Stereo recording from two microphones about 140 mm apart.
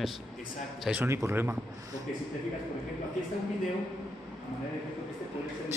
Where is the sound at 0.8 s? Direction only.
10° right (ahead or behind).